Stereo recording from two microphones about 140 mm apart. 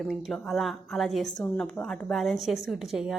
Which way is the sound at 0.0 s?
Centre (ahead or behind).